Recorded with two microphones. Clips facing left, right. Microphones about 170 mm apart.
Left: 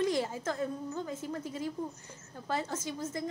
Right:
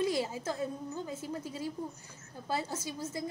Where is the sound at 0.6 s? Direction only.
25° right (ahead or behind).